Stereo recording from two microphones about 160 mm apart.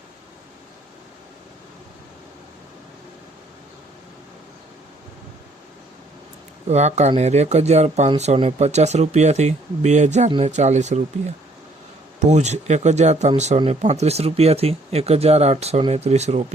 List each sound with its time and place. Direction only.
6.7 s speech: 45° right (ahead or behind)
12.2 s speech: 45° right (ahead or behind)